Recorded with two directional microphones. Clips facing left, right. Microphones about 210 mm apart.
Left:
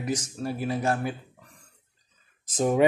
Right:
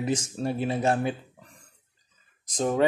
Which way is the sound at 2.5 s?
10° left (ahead or behind).